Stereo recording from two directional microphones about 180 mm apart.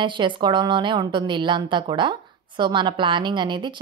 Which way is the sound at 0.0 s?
25° right (ahead or behind).